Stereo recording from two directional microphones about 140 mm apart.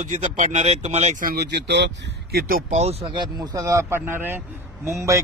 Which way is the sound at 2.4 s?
90° right.